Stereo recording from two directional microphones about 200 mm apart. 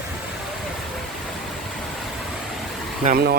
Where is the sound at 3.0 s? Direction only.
40° right (ahead or behind).